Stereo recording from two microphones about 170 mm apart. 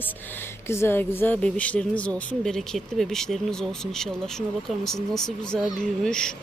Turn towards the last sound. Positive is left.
turn(degrees=5)  # may be behind; listen again after turning